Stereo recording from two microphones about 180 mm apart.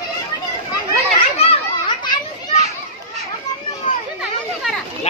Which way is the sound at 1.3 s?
35° left (ahead or behind).